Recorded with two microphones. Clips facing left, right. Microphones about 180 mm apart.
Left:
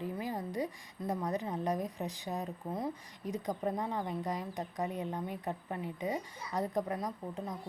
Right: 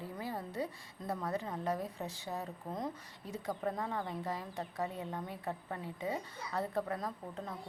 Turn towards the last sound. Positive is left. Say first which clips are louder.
# left 3 dB
turn(degrees=15)  # may be behind; listen again after turning